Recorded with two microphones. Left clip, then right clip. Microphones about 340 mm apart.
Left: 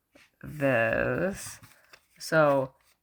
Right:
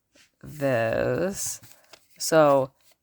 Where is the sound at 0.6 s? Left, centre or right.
Right.